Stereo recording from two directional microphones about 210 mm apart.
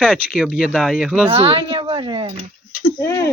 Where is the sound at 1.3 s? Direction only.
30° right (ahead or behind).